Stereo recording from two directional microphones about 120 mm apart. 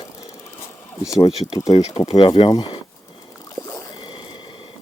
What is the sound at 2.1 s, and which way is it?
Speech, 45° left (ahead or behind).